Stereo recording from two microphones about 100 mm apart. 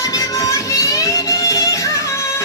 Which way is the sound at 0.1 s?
35° left (ahead or behind).